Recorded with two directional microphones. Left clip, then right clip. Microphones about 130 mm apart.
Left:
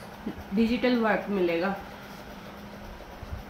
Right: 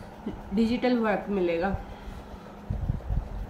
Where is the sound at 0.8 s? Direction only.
20° right (ahead or behind).